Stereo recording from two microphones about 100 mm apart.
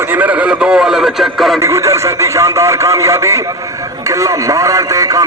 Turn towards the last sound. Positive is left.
turn(degrees=-35)  # may be behind; listen again after turning